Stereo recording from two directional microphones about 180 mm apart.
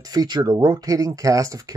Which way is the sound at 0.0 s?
20° right (ahead or behind).